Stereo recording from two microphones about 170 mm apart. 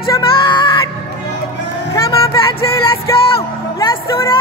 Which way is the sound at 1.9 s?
25° left (ahead or behind).